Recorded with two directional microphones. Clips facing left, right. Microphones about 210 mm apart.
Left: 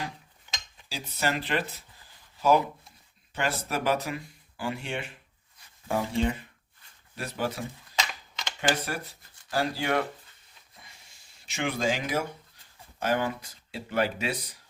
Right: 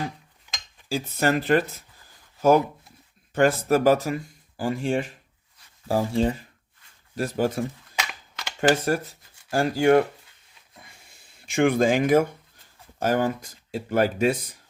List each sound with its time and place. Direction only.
0.9 s speech: 50° right (ahead or behind)
3.3 s speech: 45° right (ahead or behind)
7.9 s a sound: 10° right (ahead or behind)
8.7 s speech: 45° right (ahead or behind)
10.8 s a sound: 55° right (ahead or behind)
13.0 s speech: 45° right (ahead or behind)